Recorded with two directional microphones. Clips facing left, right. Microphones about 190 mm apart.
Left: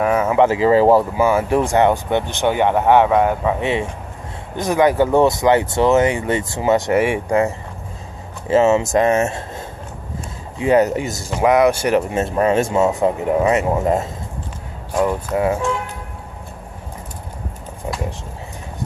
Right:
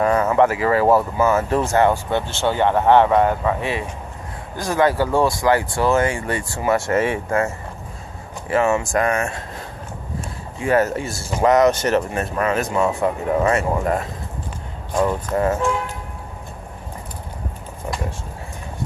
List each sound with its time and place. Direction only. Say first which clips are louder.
0.0 s a sound: left 1 dB; 5° left (ahead or behind)
0.5 s speech: left 4 dB; 20° left (ahead or behind)
4.6 s speech: left 3 dB; 20° left (ahead or behind)
10.6 s speech: left 4 dB; 20° left (ahead or behind)
12.2 s speech: left 5 dB; 30° left (ahead or behind)
15.0 s speech: left 1 dB; 10° left (ahead or behind)